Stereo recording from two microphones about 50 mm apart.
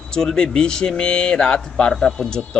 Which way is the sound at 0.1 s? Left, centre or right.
Centre.